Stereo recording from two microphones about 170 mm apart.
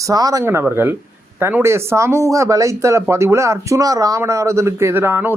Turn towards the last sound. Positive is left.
turn(degrees=-15)  # may be behind; listen again after turning